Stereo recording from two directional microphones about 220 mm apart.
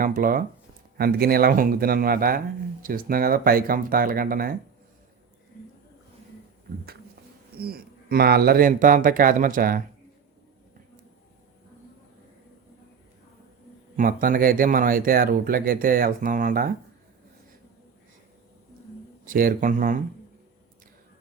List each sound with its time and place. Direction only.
0.0 s speech: 40° right (ahead or behind)
7.6 s speech: 45° right (ahead or behind)
13.9 s speech: 40° right (ahead or behind)
19.2 s speech: 40° right (ahead or behind)